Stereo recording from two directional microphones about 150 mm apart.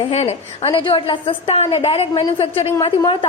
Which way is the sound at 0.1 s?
45° left (ahead or behind).